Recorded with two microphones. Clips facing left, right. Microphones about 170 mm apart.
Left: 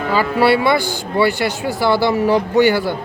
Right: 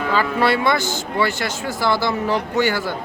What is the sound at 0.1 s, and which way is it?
Speech, 10° left (ahead or behind).